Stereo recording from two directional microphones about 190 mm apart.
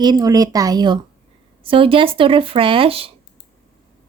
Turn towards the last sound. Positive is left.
turn(degrees=-30)  # may be behind; listen again after turning